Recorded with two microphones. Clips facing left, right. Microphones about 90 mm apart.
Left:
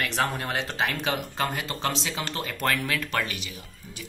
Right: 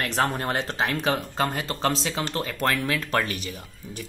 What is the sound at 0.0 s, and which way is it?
Speech, 35° right (ahead or behind).